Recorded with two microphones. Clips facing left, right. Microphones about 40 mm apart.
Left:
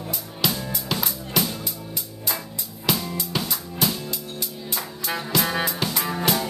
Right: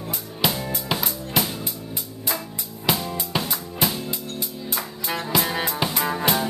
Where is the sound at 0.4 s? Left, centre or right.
Right.